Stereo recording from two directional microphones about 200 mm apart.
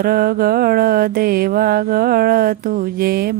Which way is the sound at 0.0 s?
50° right (ahead or behind).